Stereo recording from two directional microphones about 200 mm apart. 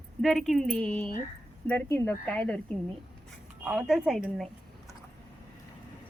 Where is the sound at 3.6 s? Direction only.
Centre (ahead or behind).